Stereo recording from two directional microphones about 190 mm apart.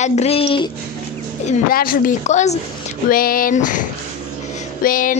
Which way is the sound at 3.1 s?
50° left (ahead or behind).